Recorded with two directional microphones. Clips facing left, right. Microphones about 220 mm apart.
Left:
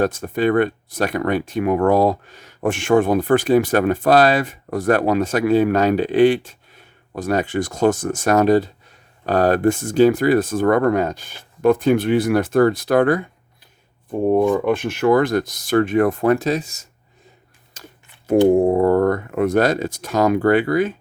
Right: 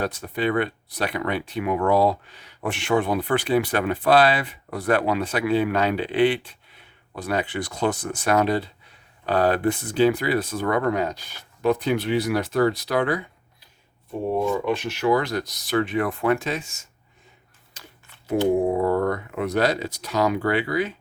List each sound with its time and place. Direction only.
0.0 s speech: 45° left (ahead or behind)
14.3 s speech: 50° left (ahead or behind)
17.7 s a sound: 45° left (ahead or behind)
18.5 s speech: 50° left (ahead or behind)